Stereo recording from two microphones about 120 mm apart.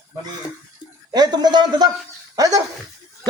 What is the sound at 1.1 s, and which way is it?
Speech, 35° right (ahead or behind).